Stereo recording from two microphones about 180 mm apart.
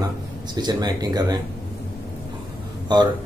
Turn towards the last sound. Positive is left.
turn(degrees=-25)  # may be behind; listen again after turning